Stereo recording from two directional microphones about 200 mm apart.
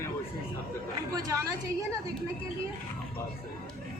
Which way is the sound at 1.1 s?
15° right (ahead or behind).